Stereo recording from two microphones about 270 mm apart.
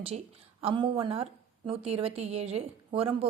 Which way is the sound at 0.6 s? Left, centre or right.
Centre.